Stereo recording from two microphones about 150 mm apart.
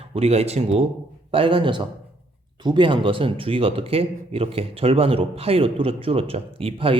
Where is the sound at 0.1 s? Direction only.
45° right (ahead or behind).